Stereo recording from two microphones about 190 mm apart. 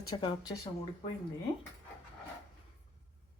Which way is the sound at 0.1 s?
20° left (ahead or behind).